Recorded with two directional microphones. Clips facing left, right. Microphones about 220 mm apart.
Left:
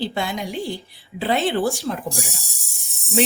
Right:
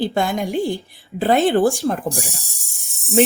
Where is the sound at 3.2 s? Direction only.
50° right (ahead or behind).